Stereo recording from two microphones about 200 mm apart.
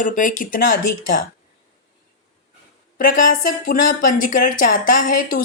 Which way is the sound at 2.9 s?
40° left (ahead or behind).